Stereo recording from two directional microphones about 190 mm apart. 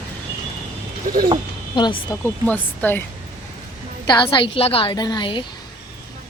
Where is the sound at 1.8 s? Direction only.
25° left (ahead or behind).